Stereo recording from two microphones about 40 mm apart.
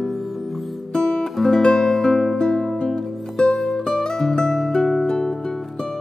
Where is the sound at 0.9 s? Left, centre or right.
Centre.